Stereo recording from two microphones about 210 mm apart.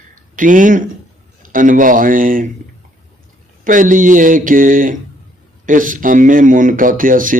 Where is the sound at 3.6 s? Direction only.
40° right (ahead or behind).